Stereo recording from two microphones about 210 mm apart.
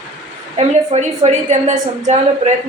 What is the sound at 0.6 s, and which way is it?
A woman's voice, 30° right (ahead or behind).